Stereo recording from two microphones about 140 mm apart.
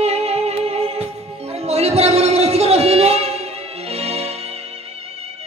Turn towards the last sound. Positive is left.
turn(degrees=-45)  # may be behind; listen again after turning